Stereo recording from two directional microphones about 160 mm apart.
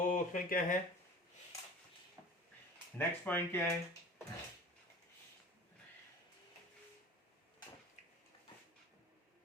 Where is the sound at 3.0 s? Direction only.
15° left (ahead or behind).